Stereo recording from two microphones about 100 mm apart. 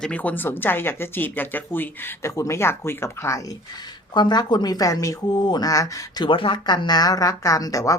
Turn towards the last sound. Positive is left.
turn(degrees=35)  # may be behind; listen again after turning